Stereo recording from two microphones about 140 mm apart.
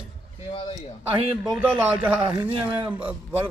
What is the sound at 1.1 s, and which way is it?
Speech, 45° right (ahead or behind).